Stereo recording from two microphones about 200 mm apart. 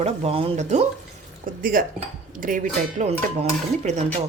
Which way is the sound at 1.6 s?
45° right (ahead or behind).